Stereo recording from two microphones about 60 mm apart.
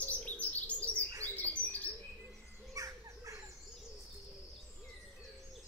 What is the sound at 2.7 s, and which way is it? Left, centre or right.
Bird, right.